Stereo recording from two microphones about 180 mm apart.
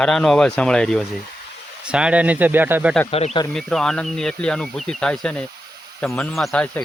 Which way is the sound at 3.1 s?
35° left (ahead or behind).